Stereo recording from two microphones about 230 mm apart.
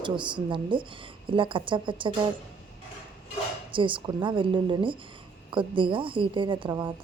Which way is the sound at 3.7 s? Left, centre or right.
Right.